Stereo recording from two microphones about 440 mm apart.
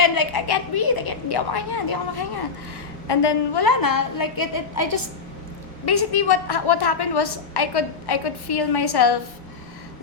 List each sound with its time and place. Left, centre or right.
0.0 s a woman's voice: left
5.8 s a woman's voice: left